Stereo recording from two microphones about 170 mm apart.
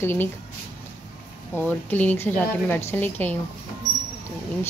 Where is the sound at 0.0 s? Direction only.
15° left (ahead or behind).